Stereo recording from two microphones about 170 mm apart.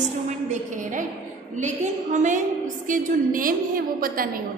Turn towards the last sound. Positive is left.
turn(degrees=-55)  # may be behind; listen again after turning